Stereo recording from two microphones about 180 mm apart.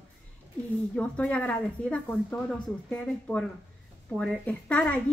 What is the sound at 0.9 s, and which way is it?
A woman's voice, 5° left (ahead or behind).